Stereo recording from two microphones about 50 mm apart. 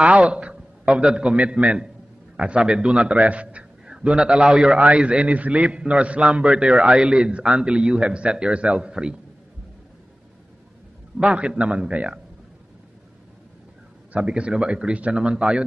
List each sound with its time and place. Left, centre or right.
0.0 s a man's voice: right
11.1 s a man's voice: right
14.1 s a man's voice: right